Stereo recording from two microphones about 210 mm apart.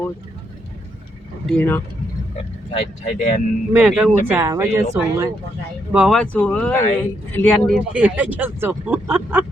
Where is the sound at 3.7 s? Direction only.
5° right (ahead or behind).